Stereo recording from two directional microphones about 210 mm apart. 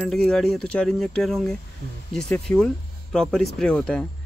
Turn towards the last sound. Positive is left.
turn(degrees=5)  # may be behind; listen again after turning